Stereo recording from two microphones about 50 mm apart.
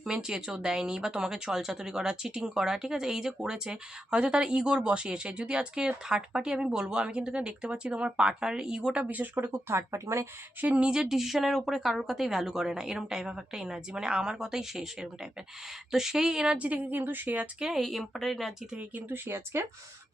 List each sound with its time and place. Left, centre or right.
0.0 s speech: centre
9.0 s a woman's voice: right
9.3 s speech: right
10.6 s speech: right
16.6 s a woman's voice: right
17.2 s a woman's voice: right
17.6 s speech: centre
17.8 s speech: centre
19.0 s speech: right